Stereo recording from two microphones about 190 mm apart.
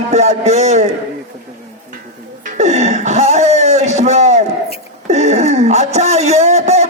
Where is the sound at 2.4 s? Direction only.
35° right (ahead or behind).